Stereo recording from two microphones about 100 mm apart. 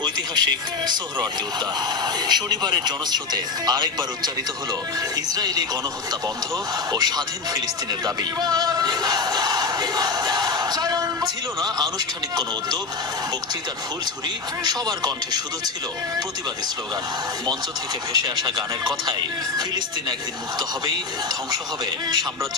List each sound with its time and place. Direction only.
0.0 s speech: 45° right (ahead or behind)
2.2 s speech: 45° right (ahead or behind)
6.9 s speech: 45° right (ahead or behind)
14.6 s speech: 45° right (ahead or behind)
18.1 s speech: 45° right (ahead or behind)